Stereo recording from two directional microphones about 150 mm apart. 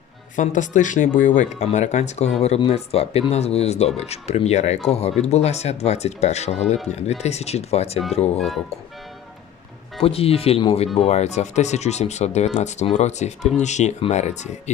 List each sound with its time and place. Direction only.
0.3 s speech: 55° left (ahead or behind)
8.4 s speech: centre (ahead or behind)
10.0 s speech: 40° left (ahead or behind)